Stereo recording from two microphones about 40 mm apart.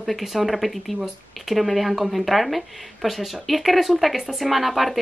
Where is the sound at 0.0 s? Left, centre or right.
Centre.